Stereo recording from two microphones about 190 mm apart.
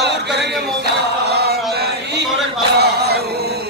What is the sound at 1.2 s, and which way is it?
Chant, 60° right (ahead or behind).